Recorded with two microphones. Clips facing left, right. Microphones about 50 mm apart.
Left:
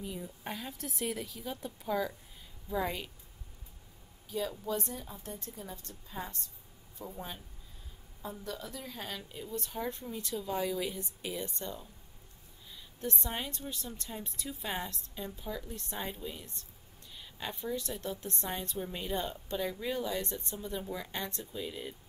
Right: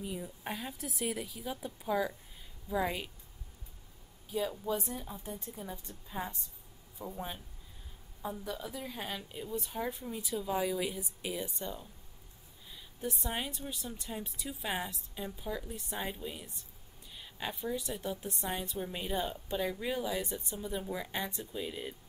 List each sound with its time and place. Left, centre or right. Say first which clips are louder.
0.0 s a woman's voice: right 1 dB; centre
4.3 s a woman's voice: right 1 dB; centre